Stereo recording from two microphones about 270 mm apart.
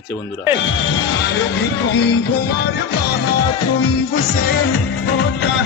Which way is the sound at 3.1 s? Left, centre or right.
Left.